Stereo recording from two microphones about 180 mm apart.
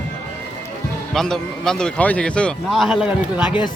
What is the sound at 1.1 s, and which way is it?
A man's voice, 5° left (ahead or behind).